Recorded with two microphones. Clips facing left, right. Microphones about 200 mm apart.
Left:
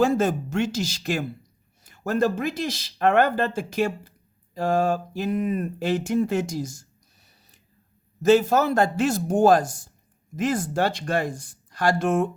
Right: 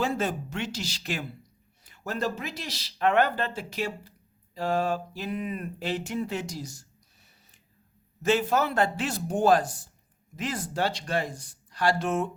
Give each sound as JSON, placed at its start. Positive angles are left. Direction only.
{"t": 0.0, "sound": "speech", "side_deg": 45}
{"t": 8.2, "sound": "speech", "side_deg": 40}